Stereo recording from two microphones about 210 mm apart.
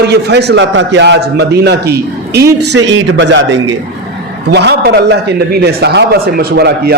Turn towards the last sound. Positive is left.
turn(degrees=-50)  # may be behind; listen again after turning